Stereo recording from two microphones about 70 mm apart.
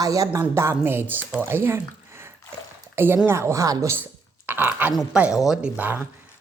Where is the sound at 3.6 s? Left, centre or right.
Right.